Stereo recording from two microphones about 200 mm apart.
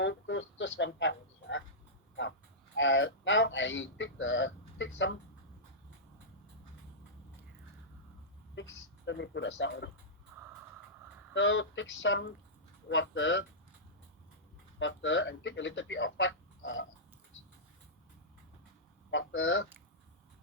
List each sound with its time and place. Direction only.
0.0 s a sound: 65° left (ahead or behind)
2.7 s a sound: 70° left (ahead or behind)
9.0 s speech: 60° left (ahead or behind)
11.3 s speech: 65° left (ahead or behind)
14.8 s speech: 70° left (ahead or behind)
19.1 s speech: 70° left (ahead or behind)